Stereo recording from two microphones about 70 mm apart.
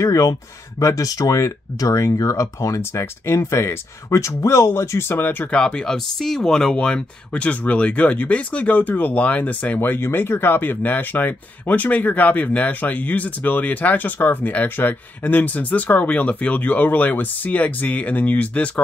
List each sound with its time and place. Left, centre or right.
0.0 s speech: left
5.5 s speech: centre